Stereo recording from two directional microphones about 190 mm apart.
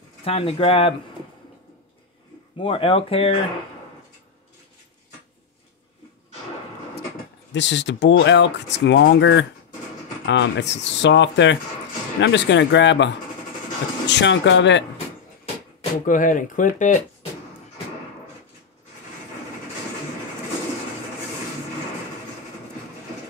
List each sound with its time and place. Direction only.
0.2 s speech: 30° left (ahead or behind)
2.5 s speech: 30° left (ahead or behind)
7.5 s speech: 70° left (ahead or behind)
16.1 s speech: 45° left (ahead or behind)